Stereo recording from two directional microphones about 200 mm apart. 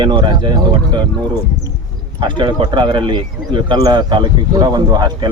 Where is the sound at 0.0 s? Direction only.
25° right (ahead or behind).